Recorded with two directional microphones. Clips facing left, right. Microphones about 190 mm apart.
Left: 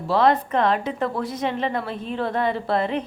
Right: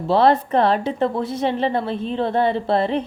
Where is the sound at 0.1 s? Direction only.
30° right (ahead or behind).